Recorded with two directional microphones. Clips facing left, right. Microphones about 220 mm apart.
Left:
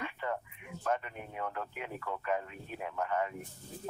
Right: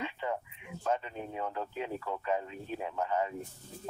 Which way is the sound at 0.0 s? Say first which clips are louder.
Right 2 dB; 20° right (ahead or behind).